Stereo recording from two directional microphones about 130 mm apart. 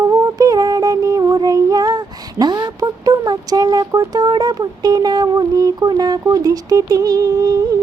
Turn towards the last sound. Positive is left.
turn(degrees=-30)  # may be behind; listen again after turning